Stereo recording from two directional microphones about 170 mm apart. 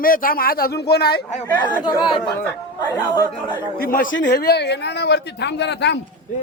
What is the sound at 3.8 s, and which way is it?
Speech, 55° left (ahead or behind).